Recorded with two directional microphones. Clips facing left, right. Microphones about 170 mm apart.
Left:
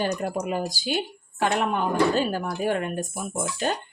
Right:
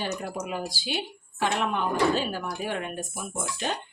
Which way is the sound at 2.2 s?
45° left (ahead or behind).